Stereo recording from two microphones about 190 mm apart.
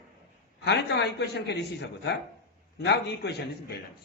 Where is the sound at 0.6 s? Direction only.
65° left (ahead or behind).